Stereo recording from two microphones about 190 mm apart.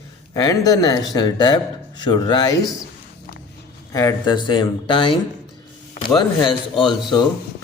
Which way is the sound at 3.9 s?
15° left (ahead or behind).